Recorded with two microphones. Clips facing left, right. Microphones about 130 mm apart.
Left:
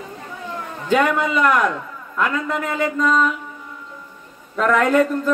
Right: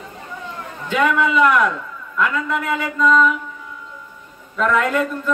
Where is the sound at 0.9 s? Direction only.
40° left (ahead or behind).